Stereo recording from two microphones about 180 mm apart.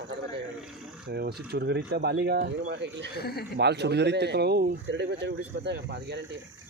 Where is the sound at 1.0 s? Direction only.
60° right (ahead or behind).